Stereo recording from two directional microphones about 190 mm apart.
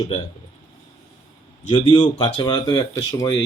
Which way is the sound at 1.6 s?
25° left (ahead or behind).